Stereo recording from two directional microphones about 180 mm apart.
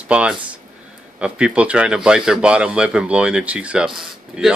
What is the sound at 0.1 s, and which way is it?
A man's voice, 5° right (ahead or behind).